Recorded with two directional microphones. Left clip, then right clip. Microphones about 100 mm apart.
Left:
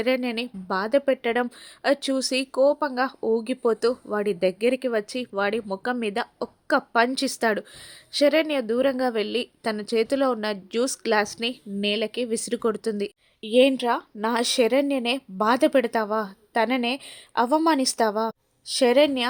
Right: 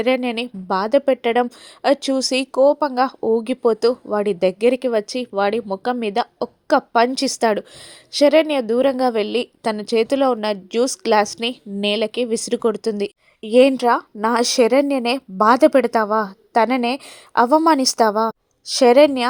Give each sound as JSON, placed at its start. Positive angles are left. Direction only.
{"t": 0.0, "sound": "a woman's voice", "side_deg": -35}